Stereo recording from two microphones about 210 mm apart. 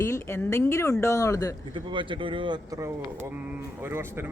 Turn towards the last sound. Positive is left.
turn(degrees=-10)  # may be behind; listen again after turning